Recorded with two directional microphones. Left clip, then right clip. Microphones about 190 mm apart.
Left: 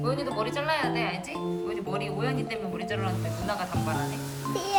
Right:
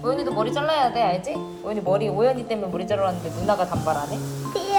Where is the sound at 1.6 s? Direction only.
20° right (ahead or behind).